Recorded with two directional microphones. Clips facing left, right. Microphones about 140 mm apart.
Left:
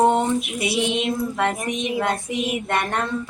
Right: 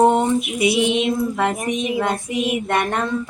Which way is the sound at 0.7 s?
5° right (ahead or behind).